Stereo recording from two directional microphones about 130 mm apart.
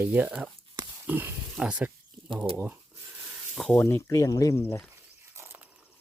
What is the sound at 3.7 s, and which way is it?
Speech, 20° left (ahead or behind).